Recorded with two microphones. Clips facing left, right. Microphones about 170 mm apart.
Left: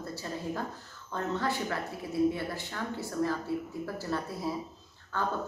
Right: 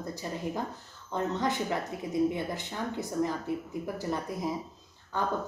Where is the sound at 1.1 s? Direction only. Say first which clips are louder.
Right 2 dB; 20° right (ahead or behind).